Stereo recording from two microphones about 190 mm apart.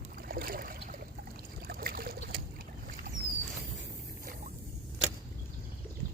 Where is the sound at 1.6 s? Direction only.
55° right (ahead or behind).